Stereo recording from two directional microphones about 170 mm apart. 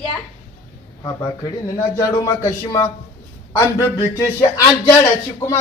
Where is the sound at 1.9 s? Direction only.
20° left (ahead or behind).